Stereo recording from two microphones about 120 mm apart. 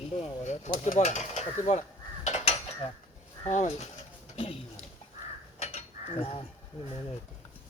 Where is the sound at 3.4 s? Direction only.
85° left.